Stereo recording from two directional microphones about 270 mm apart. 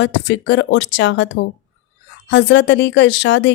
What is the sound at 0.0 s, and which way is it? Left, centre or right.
Speech, left.